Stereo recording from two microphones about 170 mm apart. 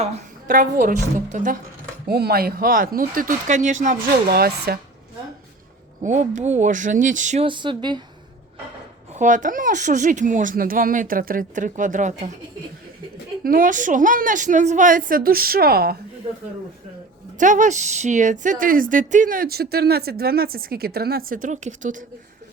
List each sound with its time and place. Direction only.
0.0 s speech: 50° right (ahead or behind)
2.0 s speech: 70° right (ahead or behind)
6.0 s speech: 45° right (ahead or behind)
7.4 s speech: 30° right (ahead or behind)
9.1 s speech: 50° right (ahead or behind)
13.4 s speech: 55° right (ahead or behind)
17.3 s speech: 50° right (ahead or behind)